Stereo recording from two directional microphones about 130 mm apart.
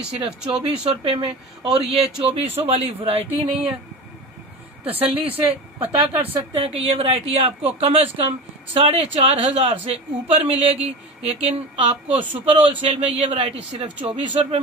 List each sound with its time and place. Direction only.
0.1 s speech: 45° right (ahead or behind)
4.8 s speech: 50° right (ahead or behind)
5.8 s a woman's voice: 15° right (ahead or behind)
6.3 s speech: 45° right (ahead or behind)